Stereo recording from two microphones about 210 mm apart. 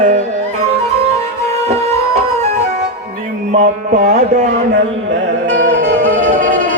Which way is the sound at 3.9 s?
35° right (ahead or behind).